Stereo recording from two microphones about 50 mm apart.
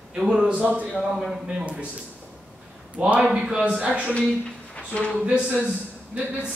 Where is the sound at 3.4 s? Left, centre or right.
Centre.